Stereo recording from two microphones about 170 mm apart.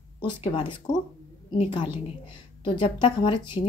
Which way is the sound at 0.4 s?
30° left (ahead or behind).